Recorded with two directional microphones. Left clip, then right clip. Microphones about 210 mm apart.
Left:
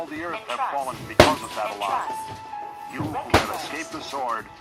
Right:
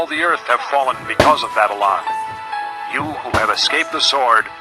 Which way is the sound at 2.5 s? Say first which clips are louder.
Right 12 dB; 40° right (ahead or behind).